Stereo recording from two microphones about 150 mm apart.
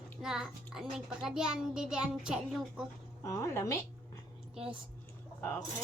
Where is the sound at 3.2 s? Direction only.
20° left (ahead or behind).